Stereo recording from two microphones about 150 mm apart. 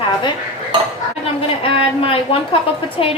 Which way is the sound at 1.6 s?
35° left (ahead or behind).